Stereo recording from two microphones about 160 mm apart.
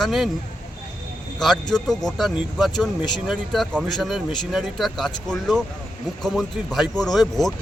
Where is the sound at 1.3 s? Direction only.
5° left (ahead or behind).